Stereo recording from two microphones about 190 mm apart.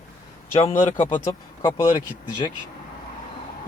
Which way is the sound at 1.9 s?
25° left (ahead or behind).